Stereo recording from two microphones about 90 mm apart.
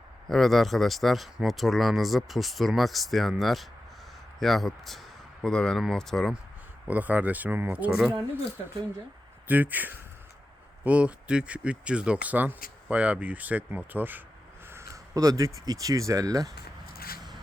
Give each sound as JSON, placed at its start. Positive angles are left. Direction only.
{"t": 0.3, "sound": "speech", "side_deg": 0}
{"t": 6.8, "sound": "speech", "side_deg": -15}
{"t": 9.5, "sound": "a man's voice", "side_deg": -20}
{"t": 14.7, "sound": "speech", "side_deg": -35}